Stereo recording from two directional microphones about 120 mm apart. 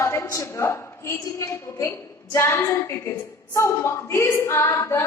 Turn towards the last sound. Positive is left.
turn(degrees=20)  # may be behind; listen again after turning